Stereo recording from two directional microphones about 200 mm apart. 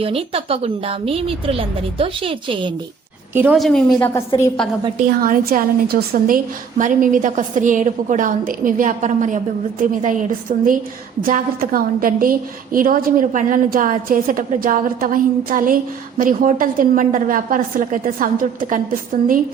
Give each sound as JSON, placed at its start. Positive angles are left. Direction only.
{"t": 0.0, "sound": "a woman's voice", "side_deg": -30}
{"t": 3.3, "sound": "a woman's voice", "side_deg": -5}
{"t": 4.9, "sound": "a woman's voice", "side_deg": -45}